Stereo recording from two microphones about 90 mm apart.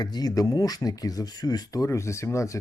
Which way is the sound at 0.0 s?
50° left (ahead or behind).